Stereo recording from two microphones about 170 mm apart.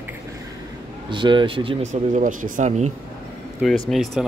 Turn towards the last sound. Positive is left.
turn(degrees=0)  # may be behind; listen again after turning